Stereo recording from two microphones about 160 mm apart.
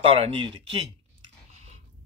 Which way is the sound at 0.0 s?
35° right (ahead or behind).